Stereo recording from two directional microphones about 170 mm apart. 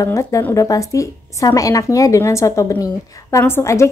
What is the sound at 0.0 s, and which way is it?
Speech, 20° left (ahead or behind).